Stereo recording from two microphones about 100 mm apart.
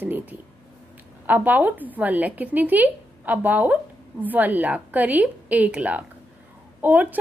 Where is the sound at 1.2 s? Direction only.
15° right (ahead or behind).